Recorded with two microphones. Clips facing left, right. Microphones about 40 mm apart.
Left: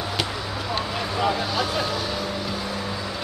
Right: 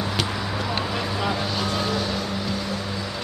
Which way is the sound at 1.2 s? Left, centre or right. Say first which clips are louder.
Left 5 dB; centre.